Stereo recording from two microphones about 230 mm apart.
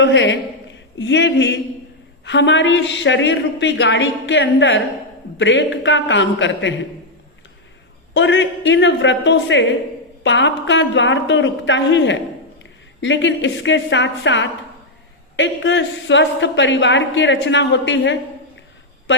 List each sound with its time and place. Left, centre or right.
0.0 s speech: left
8.1 s speech: left